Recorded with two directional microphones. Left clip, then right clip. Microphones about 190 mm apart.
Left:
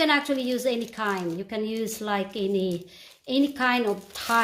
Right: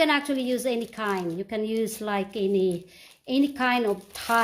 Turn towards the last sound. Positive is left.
turn(degrees=-40)  # may be behind; listen again after turning